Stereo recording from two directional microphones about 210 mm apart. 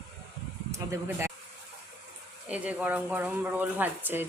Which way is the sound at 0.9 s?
10° right (ahead or behind).